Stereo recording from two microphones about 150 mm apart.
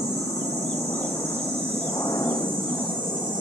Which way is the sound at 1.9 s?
25° left (ahead or behind).